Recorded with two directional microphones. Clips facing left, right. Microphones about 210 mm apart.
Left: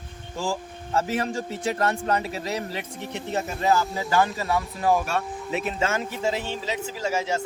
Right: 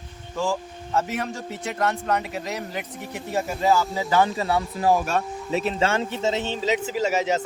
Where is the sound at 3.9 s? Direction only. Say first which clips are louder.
Right 2 dB; 20° right (ahead or behind).